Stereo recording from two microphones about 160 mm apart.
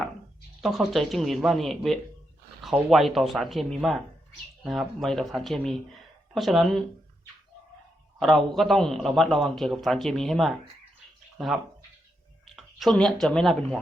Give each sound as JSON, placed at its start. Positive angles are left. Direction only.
{"t": 0.6, "sound": "a man's voice", "side_deg": 0}
{"t": 8.2, "sound": "a man's voice", "side_deg": 0}